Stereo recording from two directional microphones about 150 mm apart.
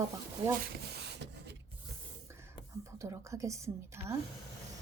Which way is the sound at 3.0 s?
20° right (ahead or behind).